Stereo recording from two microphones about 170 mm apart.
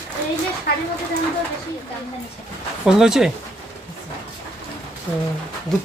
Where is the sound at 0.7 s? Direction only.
65° left (ahead or behind).